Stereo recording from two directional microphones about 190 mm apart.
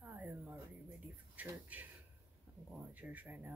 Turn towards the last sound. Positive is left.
turn(degrees=-10)  # may be behind; listen again after turning